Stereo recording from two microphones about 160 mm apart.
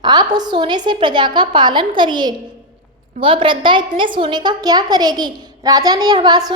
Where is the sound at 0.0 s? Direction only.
25° right (ahead or behind).